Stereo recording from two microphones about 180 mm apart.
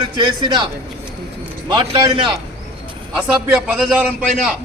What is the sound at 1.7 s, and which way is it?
Speech, 25° right (ahead or behind).